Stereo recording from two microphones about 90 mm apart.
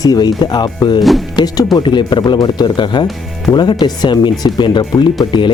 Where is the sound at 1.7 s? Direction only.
60° left (ahead or behind).